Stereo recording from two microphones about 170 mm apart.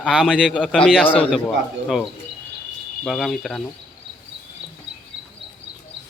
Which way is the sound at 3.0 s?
Centre (ahead or behind).